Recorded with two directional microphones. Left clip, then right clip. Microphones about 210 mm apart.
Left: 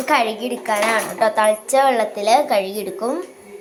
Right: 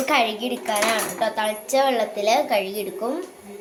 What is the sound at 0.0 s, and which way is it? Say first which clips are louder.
A woman's voice: left 3 dB; centre (ahead or behind).